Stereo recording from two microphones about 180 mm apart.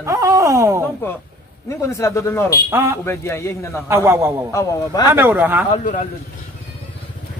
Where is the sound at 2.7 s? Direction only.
15° right (ahead or behind).